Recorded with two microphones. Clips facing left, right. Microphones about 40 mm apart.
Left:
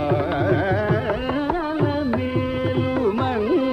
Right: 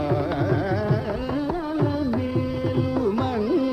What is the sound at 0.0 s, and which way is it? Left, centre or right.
Carnatic music, left.